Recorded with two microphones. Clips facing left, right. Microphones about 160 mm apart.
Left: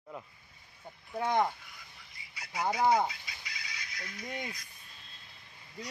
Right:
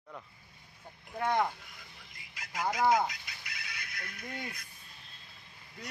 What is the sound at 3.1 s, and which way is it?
Fowl, 60° right (ahead or behind).